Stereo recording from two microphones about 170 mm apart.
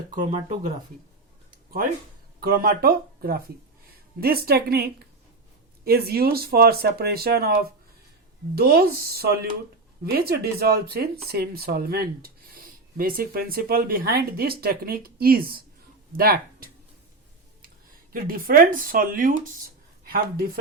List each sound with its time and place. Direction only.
0.1 s speech: 45° right (ahead or behind)
2.4 s speech: 60° right (ahead or behind)
18.1 s speech: 55° right (ahead or behind)